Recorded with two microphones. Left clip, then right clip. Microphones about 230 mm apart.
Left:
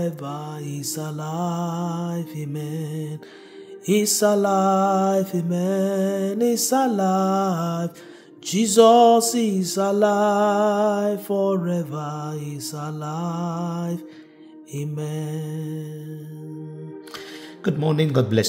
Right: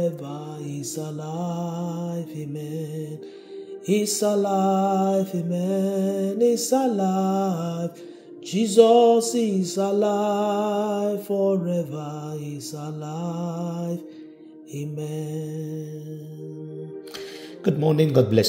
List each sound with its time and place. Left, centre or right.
0.0 s music: left
17.6 s a man's voice: centre